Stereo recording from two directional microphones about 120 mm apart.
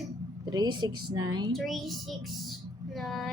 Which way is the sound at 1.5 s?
Centre (ahead or behind).